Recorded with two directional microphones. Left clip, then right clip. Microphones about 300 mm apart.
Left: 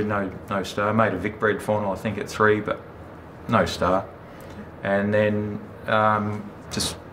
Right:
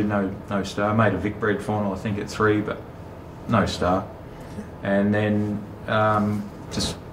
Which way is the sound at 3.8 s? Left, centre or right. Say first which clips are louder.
Left 1 dB; left.